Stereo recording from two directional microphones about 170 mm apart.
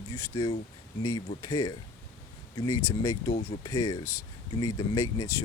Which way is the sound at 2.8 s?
20° left (ahead or behind).